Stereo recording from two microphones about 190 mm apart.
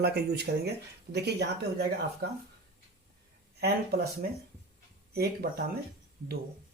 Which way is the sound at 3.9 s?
55° right (ahead or behind).